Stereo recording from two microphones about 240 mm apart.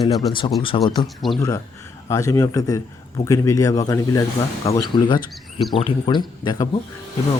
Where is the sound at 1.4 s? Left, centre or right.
Centre.